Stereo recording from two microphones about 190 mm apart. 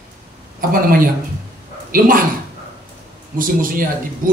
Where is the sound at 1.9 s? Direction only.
50° right (ahead or behind).